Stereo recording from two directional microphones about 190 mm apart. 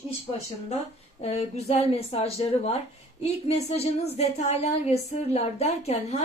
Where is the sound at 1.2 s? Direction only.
35° left (ahead or behind).